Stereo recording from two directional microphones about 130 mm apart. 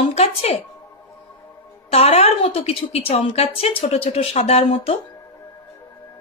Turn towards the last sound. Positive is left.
turn(degrees=50)  # may be behind; listen again after turning